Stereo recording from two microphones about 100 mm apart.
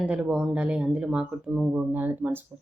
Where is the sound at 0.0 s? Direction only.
10° right (ahead or behind).